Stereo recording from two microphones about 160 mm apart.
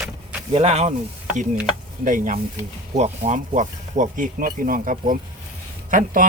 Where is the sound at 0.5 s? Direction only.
40° right (ahead or behind).